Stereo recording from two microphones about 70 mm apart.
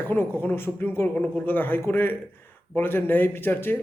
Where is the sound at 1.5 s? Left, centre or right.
Left.